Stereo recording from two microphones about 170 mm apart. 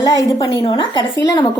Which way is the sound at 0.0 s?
20° left (ahead or behind).